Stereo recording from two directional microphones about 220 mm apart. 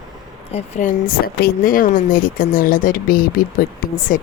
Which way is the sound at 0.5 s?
35° left (ahead or behind).